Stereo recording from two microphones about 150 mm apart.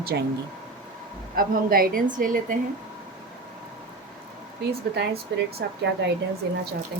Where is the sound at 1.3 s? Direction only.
75° right (ahead or behind).